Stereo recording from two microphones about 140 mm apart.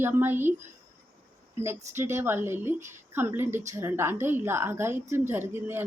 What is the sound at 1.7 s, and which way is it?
A woman's voice, 20° right (ahead or behind).